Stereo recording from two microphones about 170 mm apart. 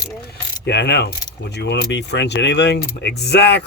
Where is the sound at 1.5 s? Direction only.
85° left.